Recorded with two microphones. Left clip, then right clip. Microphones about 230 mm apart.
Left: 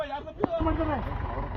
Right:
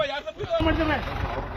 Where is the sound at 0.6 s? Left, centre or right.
Right.